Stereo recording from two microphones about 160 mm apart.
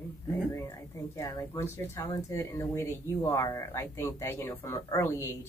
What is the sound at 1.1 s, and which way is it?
Speech, 20° left (ahead or behind).